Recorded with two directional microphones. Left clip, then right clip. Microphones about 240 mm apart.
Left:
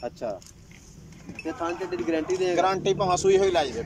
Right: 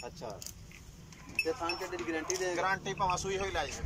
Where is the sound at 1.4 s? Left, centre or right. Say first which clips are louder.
Left 5 dB; left.